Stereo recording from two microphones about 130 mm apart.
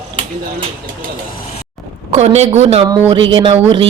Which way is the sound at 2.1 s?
55° right (ahead or behind).